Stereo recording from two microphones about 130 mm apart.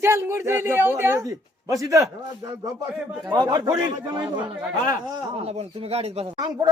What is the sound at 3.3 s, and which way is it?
A man's voice, 30° right (ahead or behind).